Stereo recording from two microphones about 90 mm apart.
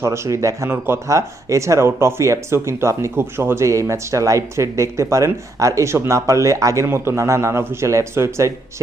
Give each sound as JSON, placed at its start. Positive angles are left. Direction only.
{"t": 0.0, "sound": "speech", "side_deg": -35}